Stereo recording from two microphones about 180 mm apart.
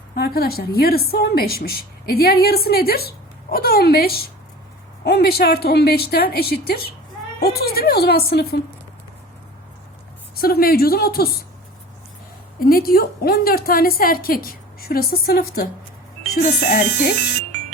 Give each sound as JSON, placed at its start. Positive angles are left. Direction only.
{"t": 0.1, "sound": "a woman's voice", "side_deg": 55}
{"t": 10.3, "sound": "a woman's voice", "side_deg": 55}
{"t": 12.5, "sound": "a woman's voice", "side_deg": 55}